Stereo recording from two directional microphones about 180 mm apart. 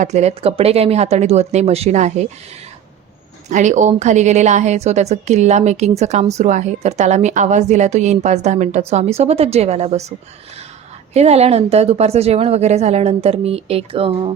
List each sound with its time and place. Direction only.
0.0 s speech: 40° right (ahead or behind)
3.5 s speech: 45° right (ahead or behind)